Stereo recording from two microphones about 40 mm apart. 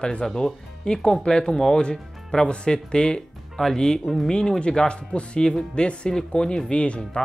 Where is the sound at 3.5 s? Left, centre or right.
Centre; by 7.2 s left.